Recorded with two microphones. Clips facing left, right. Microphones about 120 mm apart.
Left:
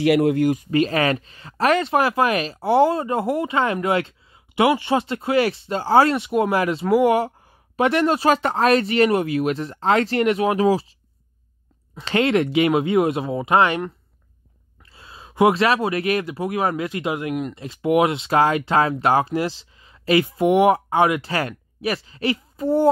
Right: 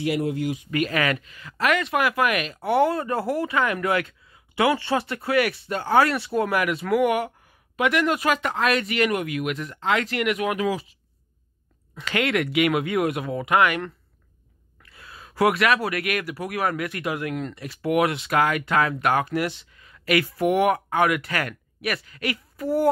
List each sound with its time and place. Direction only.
0.0 s speech: 75° left (ahead or behind)
0.7 s speech: 30° left (ahead or behind)